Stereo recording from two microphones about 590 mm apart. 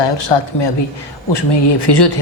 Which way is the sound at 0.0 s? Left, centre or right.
Left.